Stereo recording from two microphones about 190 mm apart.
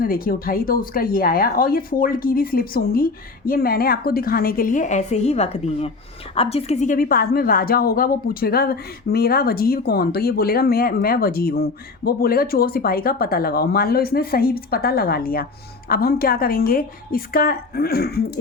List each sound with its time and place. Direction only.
0.0 s a woman's voice: 50° left (ahead or behind)